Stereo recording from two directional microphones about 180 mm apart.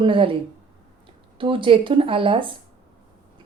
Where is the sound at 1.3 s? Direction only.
30° right (ahead or behind).